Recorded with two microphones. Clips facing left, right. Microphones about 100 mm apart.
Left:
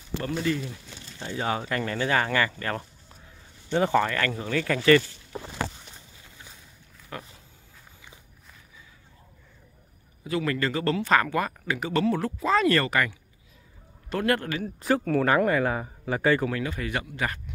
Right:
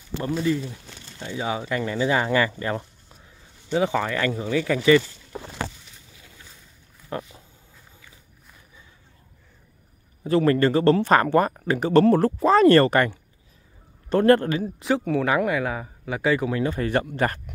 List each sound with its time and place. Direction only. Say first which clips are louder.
1.3 s speech: right 1 dB; 10° right (ahead or behind)
3.7 s speech: even; 5° right (ahead or behind)
7.1 s a sound: right 7 dB; 30° right (ahead or behind)
10.2 s a man's voice: right 8 dB; 35° right (ahead or behind)
15.0 s speech: left 1 dB; centre (ahead or behind)
16.4 s a man's voice: right 5 dB; 30° right (ahead or behind); by 17.6 s 45° right (ahead or behind)